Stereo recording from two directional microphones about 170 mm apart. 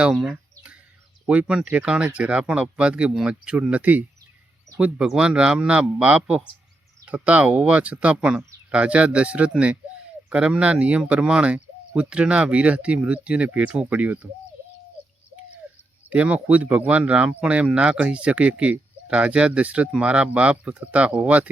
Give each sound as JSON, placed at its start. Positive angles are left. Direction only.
{"t": 0.0, "sound": "bird", "side_deg": 0}
{"t": 1.3, "sound": "speech", "side_deg": -5}
{"t": 16.0, "sound": "speech", "side_deg": -10}